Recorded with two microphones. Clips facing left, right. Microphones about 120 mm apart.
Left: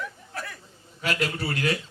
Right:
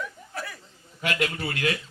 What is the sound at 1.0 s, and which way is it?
Speech, 35° left (ahead or behind).